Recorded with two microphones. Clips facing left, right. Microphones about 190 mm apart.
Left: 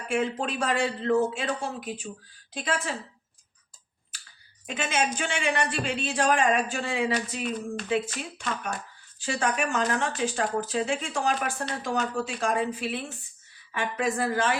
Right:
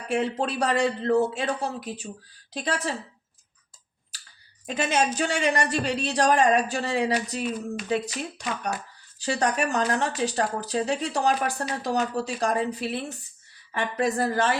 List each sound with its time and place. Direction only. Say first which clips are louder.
0.1 s a man's voice: right 2 dB; 35° right (ahead or behind)
4.6 s a man's voice: right 3 dB; 40° right (ahead or behind)